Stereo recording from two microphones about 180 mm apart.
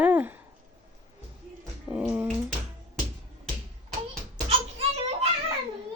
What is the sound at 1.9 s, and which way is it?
Speech, 10° right (ahead or behind).